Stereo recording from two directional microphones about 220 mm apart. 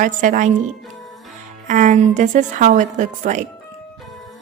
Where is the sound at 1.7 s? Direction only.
35° right (ahead or behind).